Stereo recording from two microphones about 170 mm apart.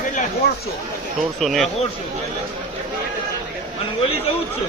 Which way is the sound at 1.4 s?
Centre (ahead or behind).